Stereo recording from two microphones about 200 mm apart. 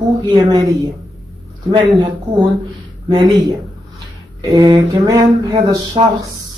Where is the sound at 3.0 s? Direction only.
20° right (ahead or behind).